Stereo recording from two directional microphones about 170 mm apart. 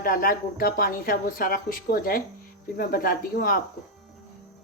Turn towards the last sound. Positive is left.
turn(degrees=60)  # may be behind; listen again after turning